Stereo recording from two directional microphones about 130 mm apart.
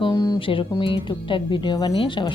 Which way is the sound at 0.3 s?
40° left (ahead or behind).